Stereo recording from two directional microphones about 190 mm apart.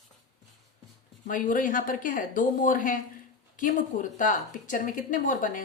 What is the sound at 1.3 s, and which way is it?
A woman's voice, 45° left (ahead or behind).